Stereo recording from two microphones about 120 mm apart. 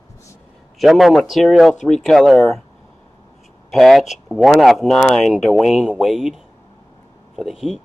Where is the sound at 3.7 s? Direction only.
Centre (ahead or behind).